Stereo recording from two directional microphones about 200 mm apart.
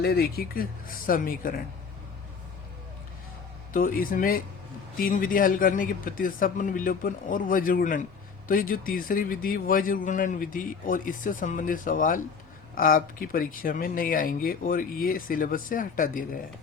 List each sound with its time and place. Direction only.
0.0 s a man's voice: 50° left (ahead or behind)
3.7 s a man's voice: 45° left (ahead or behind)